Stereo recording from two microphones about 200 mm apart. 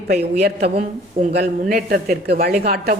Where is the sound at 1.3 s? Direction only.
50° right (ahead or behind).